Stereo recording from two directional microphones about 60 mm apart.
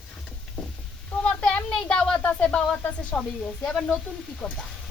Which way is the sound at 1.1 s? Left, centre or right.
Left.